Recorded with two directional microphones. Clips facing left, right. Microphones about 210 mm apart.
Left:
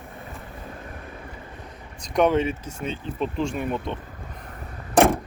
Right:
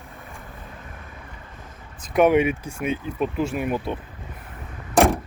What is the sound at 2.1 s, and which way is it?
Speech, 10° right (ahead or behind).